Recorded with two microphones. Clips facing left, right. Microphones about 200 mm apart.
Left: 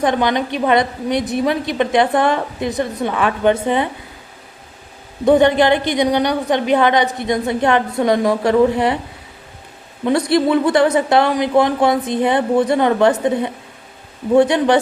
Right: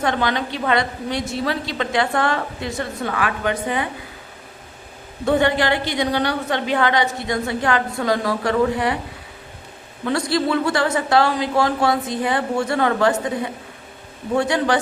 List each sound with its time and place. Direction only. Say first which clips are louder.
0.0 s a woman's voice: left 5 dB; 20° left (ahead or behind)
5.2 s a woman's voice: left 6 dB; 20° left (ahead or behind)
10.1 s a woman's voice: left 5 dB; 20° left (ahead or behind)